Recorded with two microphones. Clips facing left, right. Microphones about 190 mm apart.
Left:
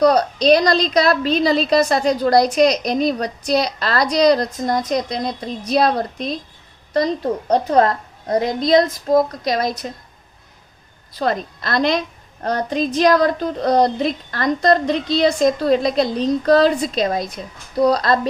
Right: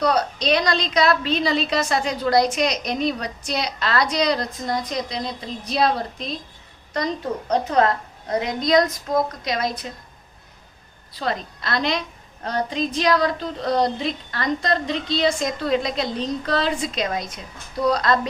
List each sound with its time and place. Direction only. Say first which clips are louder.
0.0 s a woman's voice: left 7 dB; 40° left (ahead or behind)
6.9 s a woman's voice: left 6 dB; 35° left (ahead or behind)
11.2 s a woman's voice: left 5 dB; 45° left (ahead or behind)